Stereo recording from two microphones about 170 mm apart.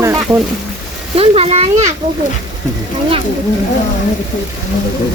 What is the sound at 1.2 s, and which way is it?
Speech, 35° right (ahead or behind).